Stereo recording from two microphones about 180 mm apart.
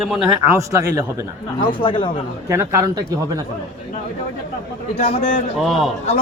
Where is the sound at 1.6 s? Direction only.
30° left (ahead or behind).